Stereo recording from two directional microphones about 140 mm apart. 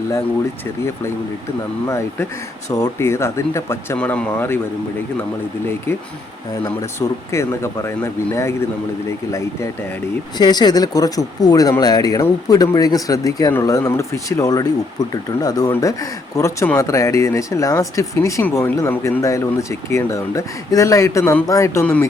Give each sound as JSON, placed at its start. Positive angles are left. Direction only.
{"t": 1.9, "sound": "speech", "side_deg": 20}
{"t": 7.3, "sound": "speech", "side_deg": 20}